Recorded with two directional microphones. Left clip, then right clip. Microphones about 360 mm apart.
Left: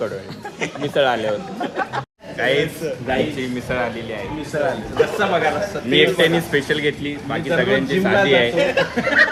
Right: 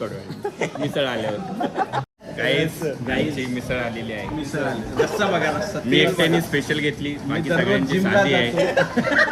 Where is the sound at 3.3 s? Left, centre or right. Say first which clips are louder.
Left 3 dB; centre.